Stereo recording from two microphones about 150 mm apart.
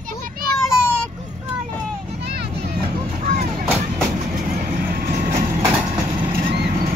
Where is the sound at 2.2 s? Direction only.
90° right; by 3.4 s 60° right (ahead or behind).